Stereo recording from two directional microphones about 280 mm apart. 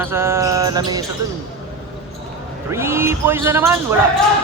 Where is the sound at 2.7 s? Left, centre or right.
Centre.